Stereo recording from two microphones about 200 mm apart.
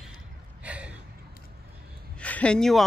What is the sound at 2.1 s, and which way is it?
Speech, 5° left (ahead or behind).